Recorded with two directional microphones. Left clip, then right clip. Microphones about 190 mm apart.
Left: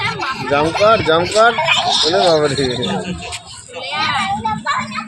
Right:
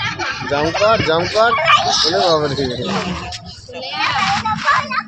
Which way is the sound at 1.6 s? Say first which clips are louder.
Right 2 dB; 10° right (ahead or behind).